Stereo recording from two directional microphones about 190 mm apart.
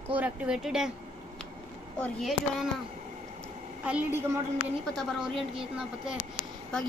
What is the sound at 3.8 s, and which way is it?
A woman's voice, 10° right (ahead or behind).